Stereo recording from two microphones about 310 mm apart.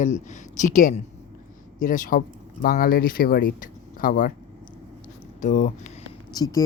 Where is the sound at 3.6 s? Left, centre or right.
Left.